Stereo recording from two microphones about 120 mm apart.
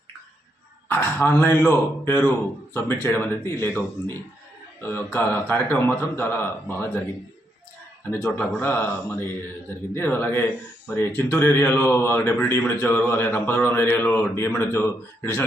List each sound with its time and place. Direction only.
0.9 s speech: 15° left (ahead or behind)
8.1 s speech: 15° left (ahead or behind)